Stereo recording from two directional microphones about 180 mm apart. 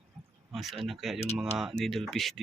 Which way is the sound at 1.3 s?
Centre (ahead or behind).